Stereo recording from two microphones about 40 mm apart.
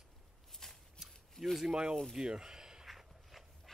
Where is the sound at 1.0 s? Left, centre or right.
Centre.